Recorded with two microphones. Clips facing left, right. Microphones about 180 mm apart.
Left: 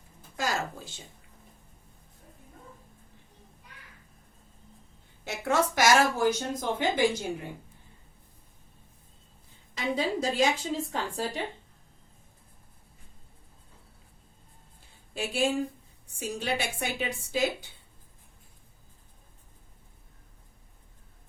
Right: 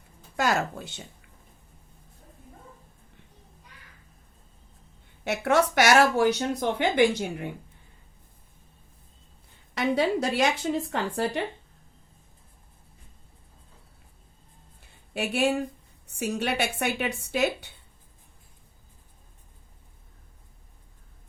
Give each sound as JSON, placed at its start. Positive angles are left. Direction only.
{"t": 0.3, "sound": "speech", "side_deg": -65}
{"t": 5.2, "sound": "speech", "side_deg": -65}
{"t": 9.7, "sound": "speech", "side_deg": -65}
{"t": 14.8, "sound": "a sound", "side_deg": -65}
{"t": 16.0, "sound": "speech", "side_deg": -65}